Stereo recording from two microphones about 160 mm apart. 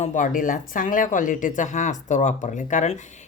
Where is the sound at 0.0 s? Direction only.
55° left (ahead or behind).